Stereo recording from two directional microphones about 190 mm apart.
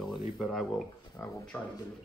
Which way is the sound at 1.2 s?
15° left (ahead or behind).